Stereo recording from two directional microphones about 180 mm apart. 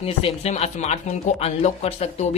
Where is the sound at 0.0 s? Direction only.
35° left (ahead or behind).